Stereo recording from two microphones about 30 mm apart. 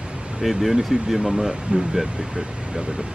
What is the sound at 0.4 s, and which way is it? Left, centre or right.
Speech, centre.